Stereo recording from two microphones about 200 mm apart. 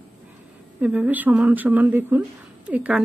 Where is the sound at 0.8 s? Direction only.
5° right (ahead or behind).